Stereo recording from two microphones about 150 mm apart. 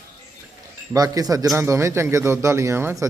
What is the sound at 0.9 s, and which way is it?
A man's voice, 25° right (ahead or behind).